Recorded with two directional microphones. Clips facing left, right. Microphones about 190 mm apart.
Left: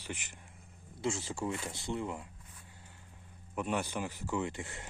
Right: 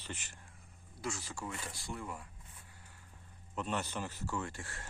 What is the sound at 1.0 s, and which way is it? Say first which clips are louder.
Speech: left 6 dB; 25° left (ahead or behind).